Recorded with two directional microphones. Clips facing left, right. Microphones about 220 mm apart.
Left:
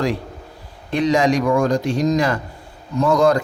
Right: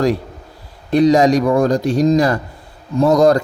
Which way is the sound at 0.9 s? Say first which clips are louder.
Right 5 dB; 40° right (ahead or behind).